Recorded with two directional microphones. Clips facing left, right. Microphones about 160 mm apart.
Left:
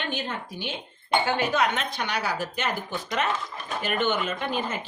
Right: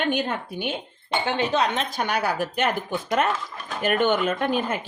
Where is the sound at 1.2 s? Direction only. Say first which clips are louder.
Right 5 dB; 25° right (ahead or behind).